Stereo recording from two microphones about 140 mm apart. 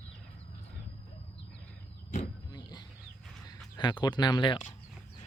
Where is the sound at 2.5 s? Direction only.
30° left (ahead or behind).